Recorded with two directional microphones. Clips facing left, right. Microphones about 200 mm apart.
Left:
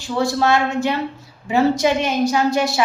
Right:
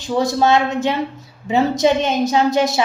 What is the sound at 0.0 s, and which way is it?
A woman's voice, 20° right (ahead or behind).